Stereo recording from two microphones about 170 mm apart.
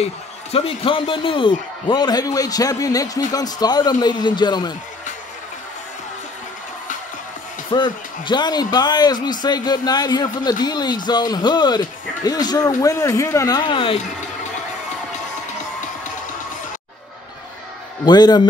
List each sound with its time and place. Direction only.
0.0 s a man's voice: 35° left (ahead or behind)
7.7 s a man's voice: 25° left (ahead or behind)
18.0 s a man's voice: 25° left (ahead or behind)